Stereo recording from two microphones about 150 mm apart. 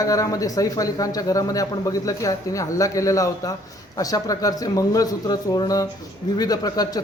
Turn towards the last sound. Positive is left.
turn(degrees=25)  # may be behind; listen again after turning